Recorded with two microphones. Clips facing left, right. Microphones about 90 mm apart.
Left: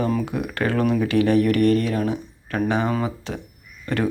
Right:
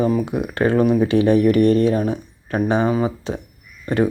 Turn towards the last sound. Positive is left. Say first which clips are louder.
# right 5 dB
turn(degrees=-20)  # may be behind; listen again after turning